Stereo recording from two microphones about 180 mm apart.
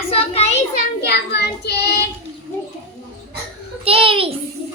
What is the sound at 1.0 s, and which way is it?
Child singing, 65° left (ahead or behind).